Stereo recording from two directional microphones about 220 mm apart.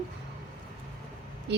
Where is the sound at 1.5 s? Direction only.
50° right (ahead or behind).